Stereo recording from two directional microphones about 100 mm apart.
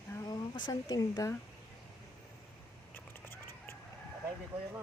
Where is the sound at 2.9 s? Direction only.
20° left (ahead or behind).